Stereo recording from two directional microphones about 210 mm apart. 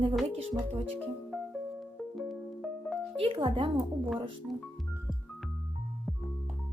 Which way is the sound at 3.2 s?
25° right (ahead or behind).